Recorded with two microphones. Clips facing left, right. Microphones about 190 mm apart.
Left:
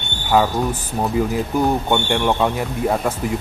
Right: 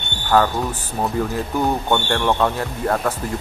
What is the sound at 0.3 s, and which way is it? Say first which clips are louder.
Speech: even; 10° left (ahead or behind).